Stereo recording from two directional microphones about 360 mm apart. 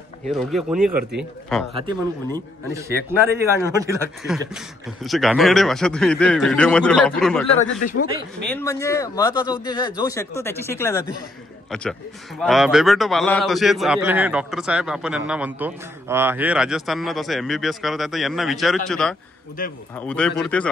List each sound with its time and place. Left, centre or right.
0.3 s a man's voice: centre
1.7 s a man's voice: centre
7.6 s speech: left
8.5 s a man's voice: centre
12.4 s a man's voice: centre
19.6 s speech: left
20.0 s a man's voice: centre